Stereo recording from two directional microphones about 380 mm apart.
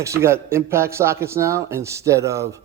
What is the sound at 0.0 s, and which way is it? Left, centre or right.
A man's voice, centre.